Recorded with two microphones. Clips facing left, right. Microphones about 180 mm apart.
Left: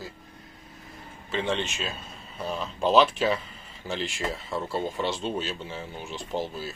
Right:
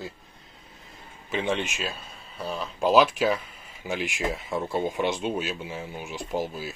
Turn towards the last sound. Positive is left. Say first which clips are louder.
# right 1 dB
turn(degrees=-10)  # may be behind; listen again after turning